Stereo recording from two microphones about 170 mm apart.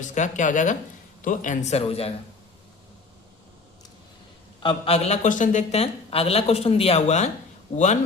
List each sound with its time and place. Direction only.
0.0 s speech: 45° left (ahead or behind)
4.6 s speech: 35° left (ahead or behind)